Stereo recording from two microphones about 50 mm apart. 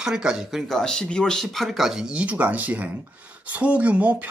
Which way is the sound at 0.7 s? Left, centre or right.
Centre.